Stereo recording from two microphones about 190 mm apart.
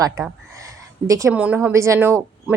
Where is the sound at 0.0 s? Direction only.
15° right (ahead or behind).